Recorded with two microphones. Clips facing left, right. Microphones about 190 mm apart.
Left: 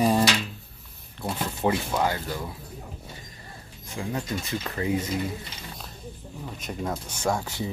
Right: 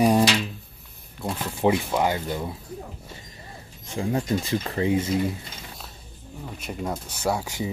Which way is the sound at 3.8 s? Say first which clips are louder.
Right 5 dB; 25° right (ahead or behind).